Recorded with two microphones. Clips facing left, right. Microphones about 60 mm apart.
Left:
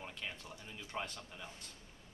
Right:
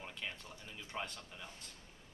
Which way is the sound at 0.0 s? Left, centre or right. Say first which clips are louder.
Even; centre.